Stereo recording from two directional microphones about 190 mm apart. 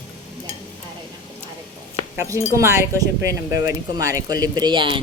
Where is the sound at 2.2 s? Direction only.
15° right (ahead or behind).